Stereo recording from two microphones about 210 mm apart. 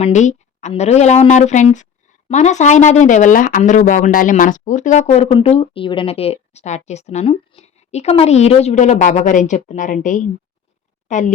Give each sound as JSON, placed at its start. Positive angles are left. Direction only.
{"t": 0.0, "sound": "speech", "side_deg": 35}